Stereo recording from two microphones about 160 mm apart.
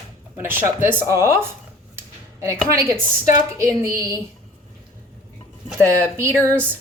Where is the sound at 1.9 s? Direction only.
20° right (ahead or behind).